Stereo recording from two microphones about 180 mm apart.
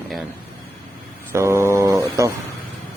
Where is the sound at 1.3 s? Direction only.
15° right (ahead or behind).